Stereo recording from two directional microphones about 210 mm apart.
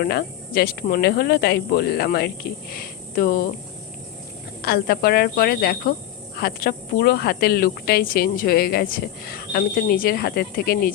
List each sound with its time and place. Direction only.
0.0 s speech: 45° left (ahead or behind)
4.6 s speech: 45° left (ahead or behind)